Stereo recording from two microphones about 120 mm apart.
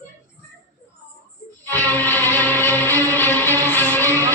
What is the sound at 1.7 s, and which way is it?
Music, 15° left (ahead or behind).